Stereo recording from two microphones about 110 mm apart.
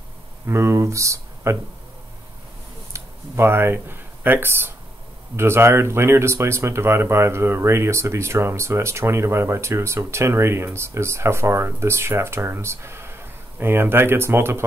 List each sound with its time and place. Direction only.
0.5 s speech: 25° right (ahead or behind)
2.9 s speech: 20° right (ahead or behind)